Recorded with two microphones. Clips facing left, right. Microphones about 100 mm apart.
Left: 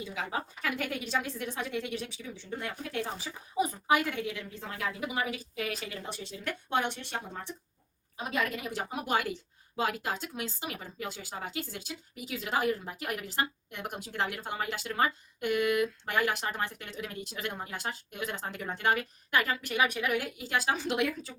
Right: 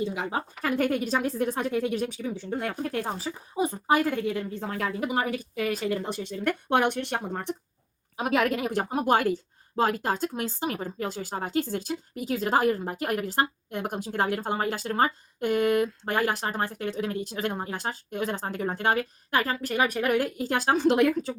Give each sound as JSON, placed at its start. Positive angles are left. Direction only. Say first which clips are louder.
{"t": 0.1, "sound": "speech", "louder": "right 5 dB", "side_deg": -35}
{"t": 0.6, "sound": "a woman's voice", "louder": "right 13 dB", "side_deg": -45}
{"t": 8.1, "sound": "a woman's voice", "louder": "right 8 dB", "side_deg": -70}